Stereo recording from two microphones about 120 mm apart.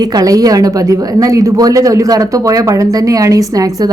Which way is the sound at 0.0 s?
30° right (ahead or behind).